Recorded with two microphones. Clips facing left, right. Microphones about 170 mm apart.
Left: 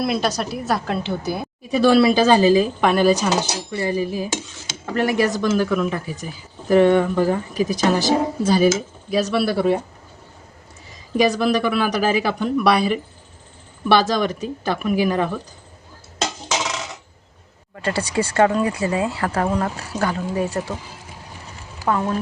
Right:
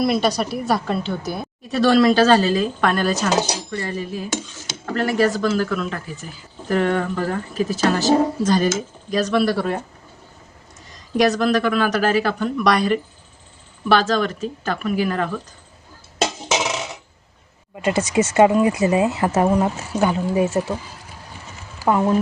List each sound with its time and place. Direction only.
0.0 s a woman's voice: centre (ahead or behind)
11.2 s a woman's voice: 10° left (ahead or behind)
16.2 s a sound: 25° right (ahead or behind)
18.3 s speech: 15° right (ahead or behind)
21.8 s speech: 15° right (ahead or behind)